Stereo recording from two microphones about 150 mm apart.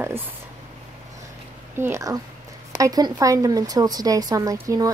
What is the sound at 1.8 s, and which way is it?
Speech, 20° right (ahead or behind).